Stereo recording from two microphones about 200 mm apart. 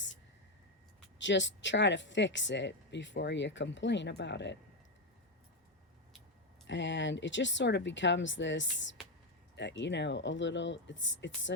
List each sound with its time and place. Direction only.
1.2 s speech: 65° left (ahead or behind)
6.7 s speech: 65° left (ahead or behind)